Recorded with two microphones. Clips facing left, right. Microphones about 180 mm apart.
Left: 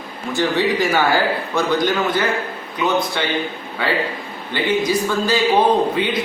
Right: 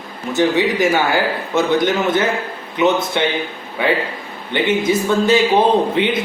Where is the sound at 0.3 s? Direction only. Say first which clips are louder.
Right 3 dB; 20° right (ahead or behind).